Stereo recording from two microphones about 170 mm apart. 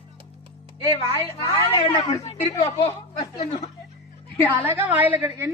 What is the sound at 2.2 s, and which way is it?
Speech, 40° left (ahead or behind).